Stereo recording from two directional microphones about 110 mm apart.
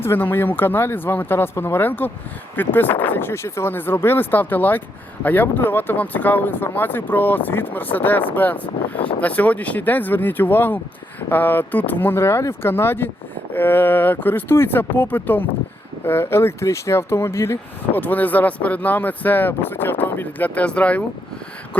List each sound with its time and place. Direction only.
0.0 s speech: 20° left (ahead or behind)